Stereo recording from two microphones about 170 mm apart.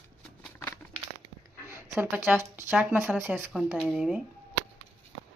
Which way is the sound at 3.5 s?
5° right (ahead or behind).